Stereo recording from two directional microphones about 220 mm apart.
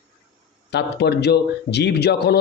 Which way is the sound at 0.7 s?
50° left (ahead or behind).